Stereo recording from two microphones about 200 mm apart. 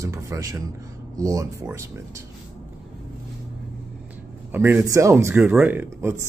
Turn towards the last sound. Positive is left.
turn(degrees=-10)  # may be behind; listen again after turning